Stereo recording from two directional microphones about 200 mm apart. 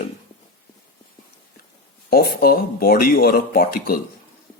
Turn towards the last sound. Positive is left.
turn(degrees=45)  # may be behind; listen again after turning